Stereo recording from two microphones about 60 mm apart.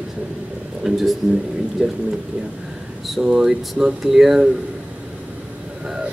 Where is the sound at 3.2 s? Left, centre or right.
Centre.